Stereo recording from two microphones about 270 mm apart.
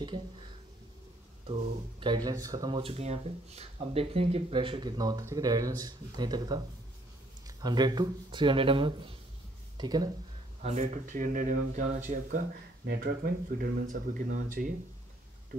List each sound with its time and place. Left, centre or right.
2.0 s speech: centre
10.6 s speech: right